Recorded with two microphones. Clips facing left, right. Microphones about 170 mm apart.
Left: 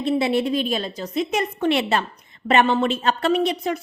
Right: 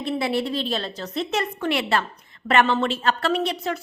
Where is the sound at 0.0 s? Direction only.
20° left (ahead or behind).